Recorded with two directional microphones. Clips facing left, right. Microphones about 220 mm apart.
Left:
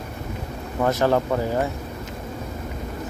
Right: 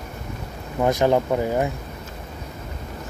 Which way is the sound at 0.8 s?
15° right (ahead or behind).